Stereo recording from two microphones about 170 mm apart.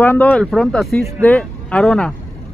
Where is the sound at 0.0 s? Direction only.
10° left (ahead or behind).